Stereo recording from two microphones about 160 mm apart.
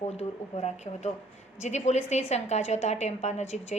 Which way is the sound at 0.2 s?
45° left (ahead or behind).